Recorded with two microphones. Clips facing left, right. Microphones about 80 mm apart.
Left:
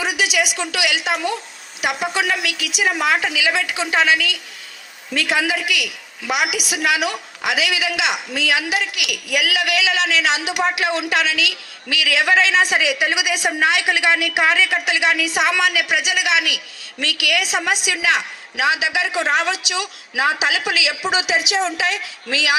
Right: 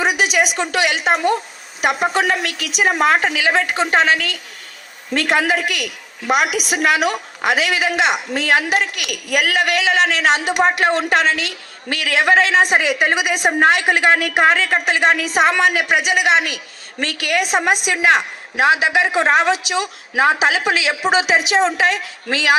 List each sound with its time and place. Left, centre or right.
0.0 s a woman's voice: right